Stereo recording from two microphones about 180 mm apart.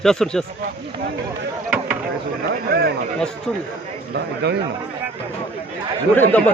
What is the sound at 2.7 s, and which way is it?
Speech, 60° right (ahead or behind).